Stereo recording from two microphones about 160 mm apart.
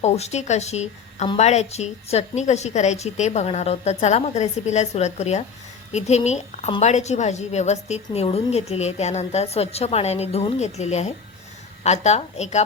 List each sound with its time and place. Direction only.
0.0 s a woman's voice: 45° left (ahead or behind)